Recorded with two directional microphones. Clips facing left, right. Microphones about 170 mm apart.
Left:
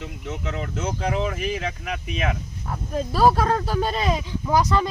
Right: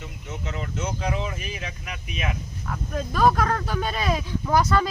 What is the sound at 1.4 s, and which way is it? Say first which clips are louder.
Speech: left 8 dB; 90° left.